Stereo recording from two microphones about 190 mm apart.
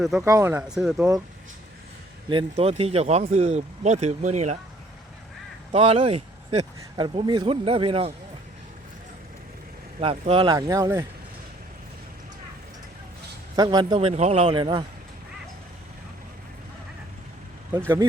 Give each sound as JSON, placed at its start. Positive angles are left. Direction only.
{"t": 0.2, "sound": "speech", "side_deg": -15}
{"t": 0.7, "sound": "speech", "side_deg": -5}
{"t": 2.3, "sound": "speech", "side_deg": -30}
{"t": 5.7, "sound": "speech", "side_deg": -30}
{"t": 10.0, "sound": "speech", "side_deg": -30}
{"t": 13.6, "sound": "speech", "side_deg": -25}
{"t": 17.7, "sound": "speech", "side_deg": -15}